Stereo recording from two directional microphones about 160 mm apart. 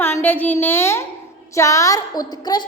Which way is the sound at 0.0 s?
15° left (ahead or behind).